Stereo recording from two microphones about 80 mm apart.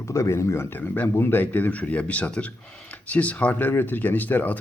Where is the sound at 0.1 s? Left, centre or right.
Left.